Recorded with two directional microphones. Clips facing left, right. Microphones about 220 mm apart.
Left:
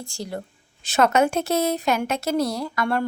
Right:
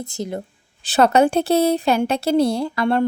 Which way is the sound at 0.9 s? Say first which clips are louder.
Right 4 dB; 35° right (ahead or behind).